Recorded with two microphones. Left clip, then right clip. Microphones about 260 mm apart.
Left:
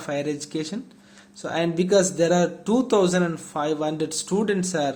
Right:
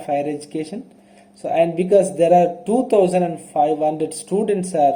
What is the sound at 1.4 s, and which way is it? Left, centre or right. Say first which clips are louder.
A man's voice: right 7 dB; left.